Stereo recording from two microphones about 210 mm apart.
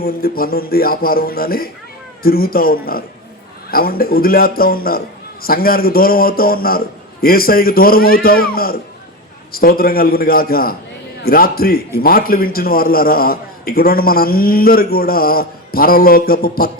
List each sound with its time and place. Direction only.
0.0 s a man's voice: 45° left (ahead or behind)